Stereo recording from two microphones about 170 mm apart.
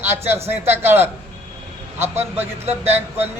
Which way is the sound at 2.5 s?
40° right (ahead or behind).